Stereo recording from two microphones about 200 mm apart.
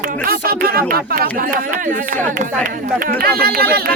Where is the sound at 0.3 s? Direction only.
50° right (ahead or behind).